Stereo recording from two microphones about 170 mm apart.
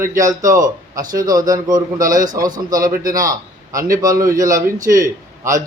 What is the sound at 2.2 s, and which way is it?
A man's voice, 20° right (ahead or behind).